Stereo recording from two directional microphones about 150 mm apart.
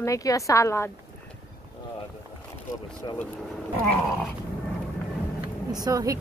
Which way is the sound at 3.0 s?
25° left (ahead or behind).